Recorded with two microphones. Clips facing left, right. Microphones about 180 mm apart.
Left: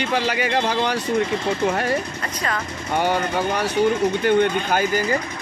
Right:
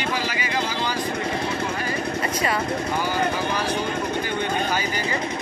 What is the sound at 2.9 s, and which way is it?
Speech, 65° left (ahead or behind).